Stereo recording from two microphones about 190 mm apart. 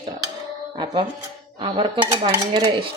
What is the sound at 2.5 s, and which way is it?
Dishes, 25° right (ahead or behind).